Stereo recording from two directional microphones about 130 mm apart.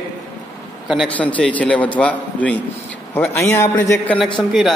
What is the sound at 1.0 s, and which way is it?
A man's voice, 10° left (ahead or behind).